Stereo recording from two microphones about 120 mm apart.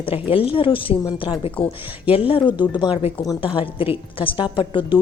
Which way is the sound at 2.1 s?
50° left (ahead or behind).